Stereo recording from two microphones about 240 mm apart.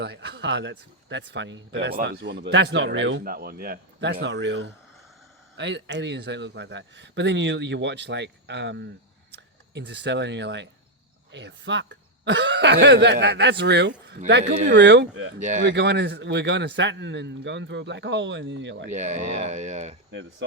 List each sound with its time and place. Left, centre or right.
0.0 s speech: right
14.4 s speech: right
14.7 s speech: right
15.4 s speech: right
15.6 s speech: right
18.9 s speech: right